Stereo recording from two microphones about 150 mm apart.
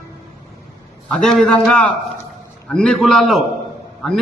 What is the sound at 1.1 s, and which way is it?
A man's voice, 5° left (ahead or behind).